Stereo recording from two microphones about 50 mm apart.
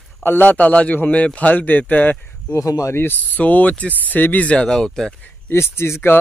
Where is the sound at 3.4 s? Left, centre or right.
Left.